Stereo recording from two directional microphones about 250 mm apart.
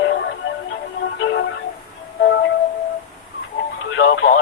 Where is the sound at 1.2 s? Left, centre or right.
Left.